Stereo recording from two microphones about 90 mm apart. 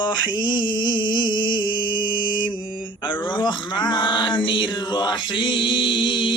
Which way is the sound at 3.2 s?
60° left (ahead or behind).